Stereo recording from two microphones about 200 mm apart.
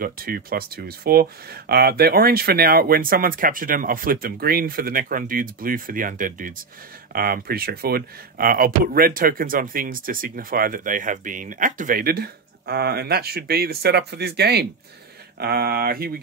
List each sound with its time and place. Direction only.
0.0 s speech: 50° right (ahead or behind)